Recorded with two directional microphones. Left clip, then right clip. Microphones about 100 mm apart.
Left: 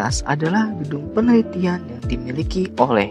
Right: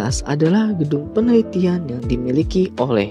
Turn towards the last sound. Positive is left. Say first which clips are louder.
# left 1 dB
turn(degrees=-20)  # may be behind; listen again after turning